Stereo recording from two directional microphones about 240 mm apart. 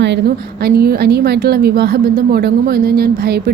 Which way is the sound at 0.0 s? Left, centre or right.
Right.